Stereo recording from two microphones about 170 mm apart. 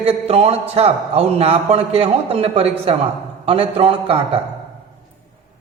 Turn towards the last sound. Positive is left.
turn(degrees=-35)  # may be behind; listen again after turning